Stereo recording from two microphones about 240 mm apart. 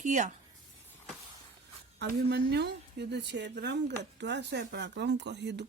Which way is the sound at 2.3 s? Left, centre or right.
Right.